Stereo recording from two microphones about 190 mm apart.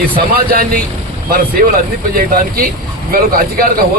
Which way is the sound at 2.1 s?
50° right (ahead or behind).